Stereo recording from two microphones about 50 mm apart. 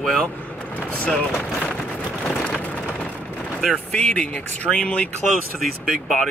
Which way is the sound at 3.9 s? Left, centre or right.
Left.